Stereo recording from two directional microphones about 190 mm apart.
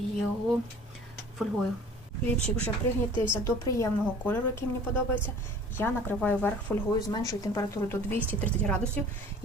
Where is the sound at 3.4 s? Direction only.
10° left (ahead or behind).